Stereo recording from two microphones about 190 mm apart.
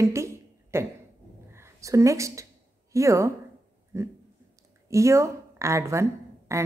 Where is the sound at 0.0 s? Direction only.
15° right (ahead or behind).